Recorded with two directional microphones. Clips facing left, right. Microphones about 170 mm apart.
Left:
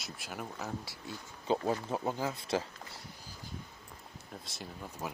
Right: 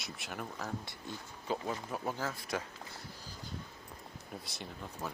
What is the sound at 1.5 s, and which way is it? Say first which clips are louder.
Speech: left 5 dB; 25° left (ahead or behind).